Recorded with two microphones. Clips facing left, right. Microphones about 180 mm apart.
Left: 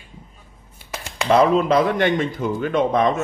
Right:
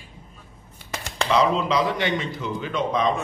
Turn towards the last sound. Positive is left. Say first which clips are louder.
# left 5 dB
turn(degrees=50)  # may be behind; listen again after turning